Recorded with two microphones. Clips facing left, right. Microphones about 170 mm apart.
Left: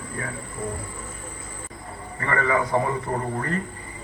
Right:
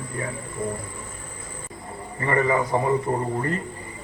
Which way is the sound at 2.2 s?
20° right (ahead or behind).